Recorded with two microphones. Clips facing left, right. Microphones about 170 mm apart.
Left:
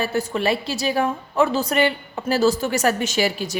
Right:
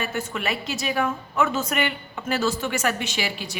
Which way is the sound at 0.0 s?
35° left (ahead or behind).